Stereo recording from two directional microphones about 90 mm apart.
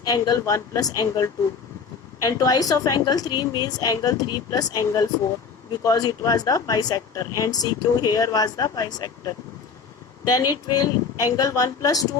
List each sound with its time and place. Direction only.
0.0 s speech: 45° left (ahead or behind)